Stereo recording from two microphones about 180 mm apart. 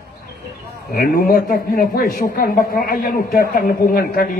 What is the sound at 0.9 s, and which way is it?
A man's voice, 55° left (ahead or behind).